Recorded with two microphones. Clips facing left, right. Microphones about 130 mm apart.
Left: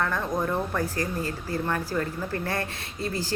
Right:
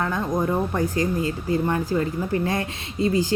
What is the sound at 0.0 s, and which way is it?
Speech, 15° right (ahead or behind).